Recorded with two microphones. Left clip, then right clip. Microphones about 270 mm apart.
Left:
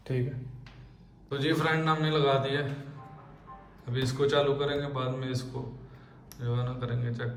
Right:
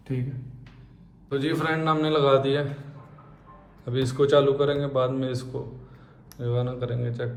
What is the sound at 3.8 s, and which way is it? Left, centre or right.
A man's voice, centre.